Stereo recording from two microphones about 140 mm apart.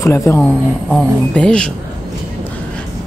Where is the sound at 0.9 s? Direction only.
5° left (ahead or behind).